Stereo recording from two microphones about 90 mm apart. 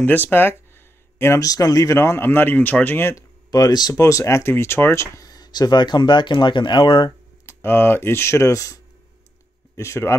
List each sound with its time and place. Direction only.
0.0 s speech: 20° left (ahead or behind)
3.4 s speech: 45° left (ahead or behind)
3.9 s speech: 35° left (ahead or behind); by 7.1 s 65° left (ahead or behind)
7.1 s speech: 30° left (ahead or behind)